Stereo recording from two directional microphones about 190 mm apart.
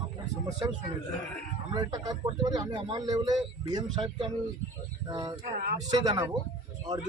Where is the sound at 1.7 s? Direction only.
20° right (ahead or behind).